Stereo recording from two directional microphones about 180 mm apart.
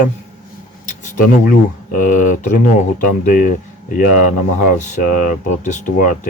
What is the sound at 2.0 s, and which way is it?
Speech, 45° left (ahead or behind).